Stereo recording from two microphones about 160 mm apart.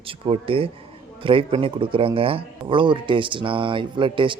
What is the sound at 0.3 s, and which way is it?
Speech, 35° right (ahead or behind).